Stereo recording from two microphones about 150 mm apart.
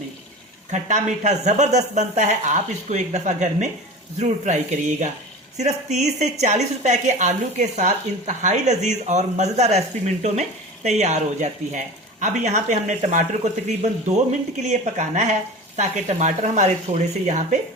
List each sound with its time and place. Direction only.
0.7 s speech: 55° right (ahead or behind)
10.8 s speech: 50° right (ahead or behind)